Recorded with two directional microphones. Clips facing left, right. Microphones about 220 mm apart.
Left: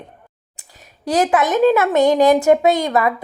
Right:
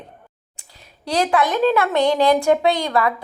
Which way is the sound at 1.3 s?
20° left (ahead or behind).